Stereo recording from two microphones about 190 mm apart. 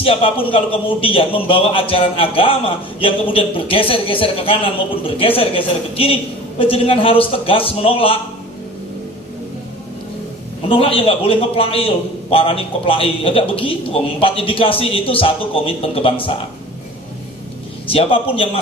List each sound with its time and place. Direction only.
0.0 s a man's voice: 30° left (ahead or behind)
10.7 s a man's voice: 30° left (ahead or behind)
17.9 s a man's voice: 30° left (ahead or behind)